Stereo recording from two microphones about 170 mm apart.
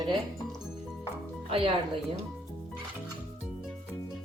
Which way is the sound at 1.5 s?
30° right (ahead or behind).